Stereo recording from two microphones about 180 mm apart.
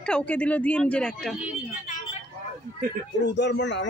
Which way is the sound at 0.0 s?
5° left (ahead or behind).